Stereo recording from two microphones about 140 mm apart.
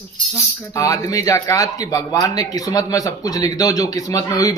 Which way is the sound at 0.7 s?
20° left (ahead or behind).